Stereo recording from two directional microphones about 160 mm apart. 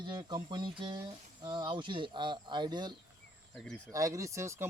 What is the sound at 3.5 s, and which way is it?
Speech, 5° left (ahead or behind).